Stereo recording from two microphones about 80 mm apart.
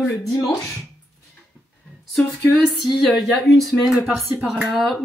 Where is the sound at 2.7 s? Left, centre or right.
Centre.